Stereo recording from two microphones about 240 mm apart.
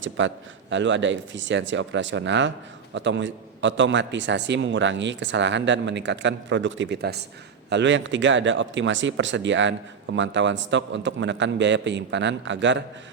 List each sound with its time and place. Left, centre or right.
0.0 s speech: right